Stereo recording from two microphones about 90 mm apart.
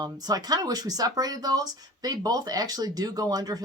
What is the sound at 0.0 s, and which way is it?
Speech, 45° right (ahead or behind).